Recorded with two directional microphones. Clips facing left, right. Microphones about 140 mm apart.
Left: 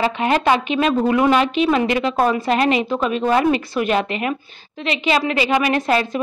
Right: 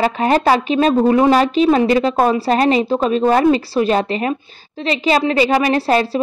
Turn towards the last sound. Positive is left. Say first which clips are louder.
# right 3 dB
turn(degrees=-35)  # may be behind; listen again after turning